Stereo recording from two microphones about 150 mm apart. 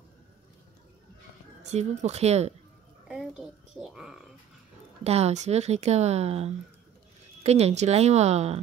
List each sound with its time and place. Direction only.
1.6 s speech: 50° right (ahead or behind)
3.1 s a woman's voice: 5° right (ahead or behind)
5.0 s speech: 45° right (ahead or behind)